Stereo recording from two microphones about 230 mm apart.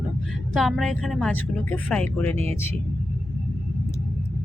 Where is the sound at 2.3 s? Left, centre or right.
Right.